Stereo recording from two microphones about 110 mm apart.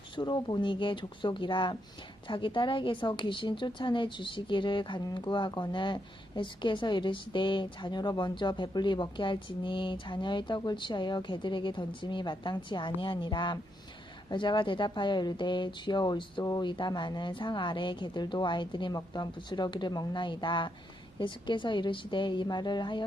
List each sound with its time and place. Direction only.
0.2 s a woman's voice: 45° left (ahead or behind)
16.4 s speech: 35° left (ahead or behind)
16.6 s a woman's voice: 45° left (ahead or behind)